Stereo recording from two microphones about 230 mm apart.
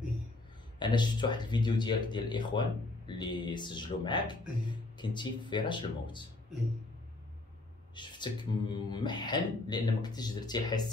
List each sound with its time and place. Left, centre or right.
0.7 s speech: centre
7.9 s speech: centre